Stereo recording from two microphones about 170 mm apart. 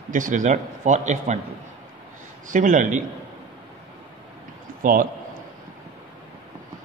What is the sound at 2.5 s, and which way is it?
Speech, 50° right (ahead or behind).